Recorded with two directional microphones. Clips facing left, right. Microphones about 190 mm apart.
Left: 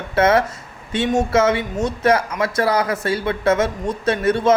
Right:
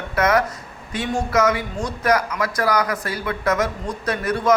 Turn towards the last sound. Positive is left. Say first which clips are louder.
# left 4 dB
turn(degrees=25)  # may be behind; listen again after turning